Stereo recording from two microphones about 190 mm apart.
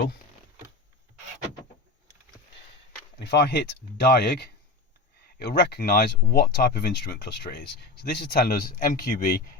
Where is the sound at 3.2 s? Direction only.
60° left (ahead or behind).